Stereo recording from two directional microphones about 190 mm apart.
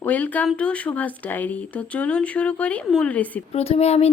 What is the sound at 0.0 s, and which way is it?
Speech, 10° left (ahead or behind).